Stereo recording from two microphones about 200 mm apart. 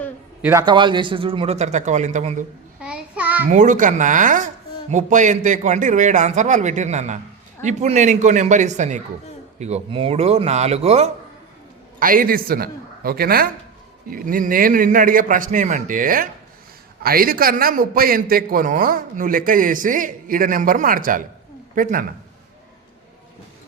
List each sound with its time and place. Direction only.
0.6 s speech: 20° right (ahead or behind); by 2.5 s 40° right (ahead or behind)
2.8 s child singing: 5° right (ahead or behind)
3.5 s speech: 40° right (ahead or behind)
11.9 s a man's voice: 45° right (ahead or behind)